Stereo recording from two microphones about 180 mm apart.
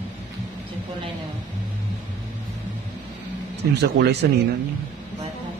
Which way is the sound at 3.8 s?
65° right (ahead or behind).